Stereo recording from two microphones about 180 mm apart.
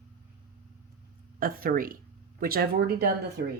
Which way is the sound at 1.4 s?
50° right (ahead or behind).